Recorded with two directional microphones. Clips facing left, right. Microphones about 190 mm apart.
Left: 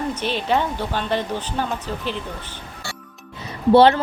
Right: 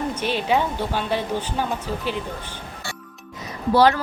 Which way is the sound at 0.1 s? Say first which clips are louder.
Even; 10° right (ahead or behind).